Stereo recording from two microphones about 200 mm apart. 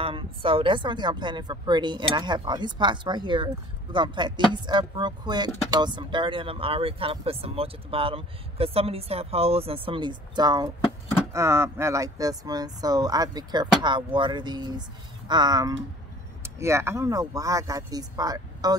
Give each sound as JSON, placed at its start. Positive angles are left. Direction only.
{"t": 0.0, "sound": "speech", "side_deg": -25}